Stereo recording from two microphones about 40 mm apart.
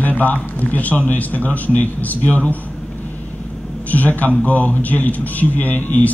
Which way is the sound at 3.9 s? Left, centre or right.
Left.